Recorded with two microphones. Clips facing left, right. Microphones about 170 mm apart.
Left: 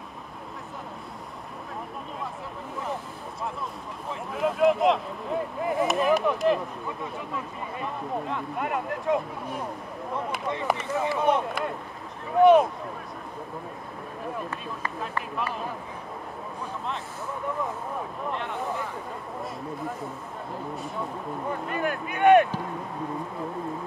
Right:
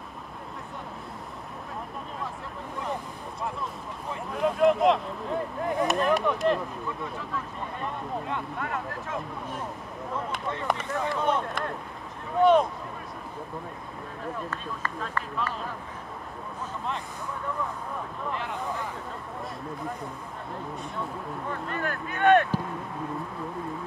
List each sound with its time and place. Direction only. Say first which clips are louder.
4.1 s speech: even; centre (ahead or behind)
7.8 s speech: left 2 dB; centre (ahead or behind)
8.5 s speech: left 4 dB; 15° left (ahead or behind)
10.7 s speech: left 2 dB; 5° left (ahead or behind)
14.5 s speech: left 1 dB; 15° left (ahead or behind)
18.3 s speech: even; centre (ahead or behind)
21.5 s speech: left 4 dB; 15° left (ahead or behind)